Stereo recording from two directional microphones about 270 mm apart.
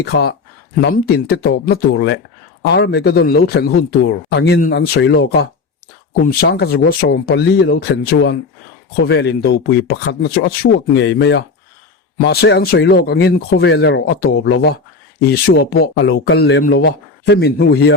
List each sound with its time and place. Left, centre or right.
0.0 s speech: left